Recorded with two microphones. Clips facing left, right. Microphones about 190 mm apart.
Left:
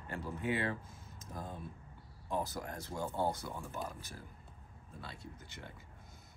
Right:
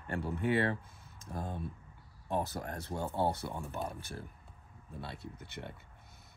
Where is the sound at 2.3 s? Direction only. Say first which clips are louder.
Right 3 dB; 65° right (ahead or behind).